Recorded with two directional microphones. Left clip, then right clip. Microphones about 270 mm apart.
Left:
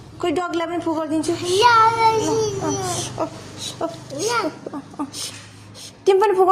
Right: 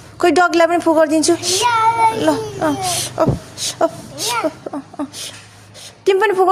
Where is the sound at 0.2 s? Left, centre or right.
Right.